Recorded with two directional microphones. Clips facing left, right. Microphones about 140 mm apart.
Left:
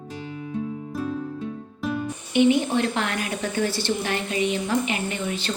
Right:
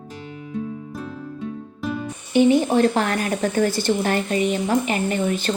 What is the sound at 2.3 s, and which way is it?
A woman's voice, 35° right (ahead or behind).